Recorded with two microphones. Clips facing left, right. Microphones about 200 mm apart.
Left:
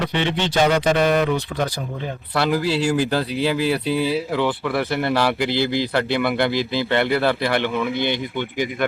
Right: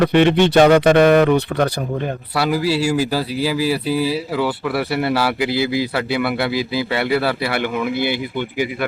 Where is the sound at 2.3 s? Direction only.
5° right (ahead or behind).